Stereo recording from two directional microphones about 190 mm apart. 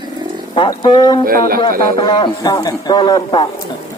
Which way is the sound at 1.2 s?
50° right (ahead or behind).